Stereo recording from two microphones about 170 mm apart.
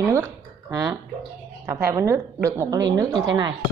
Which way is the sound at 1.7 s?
15° right (ahead or behind).